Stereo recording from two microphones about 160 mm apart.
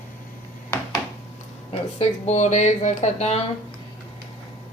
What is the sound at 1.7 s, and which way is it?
Speech, 40° left (ahead or behind).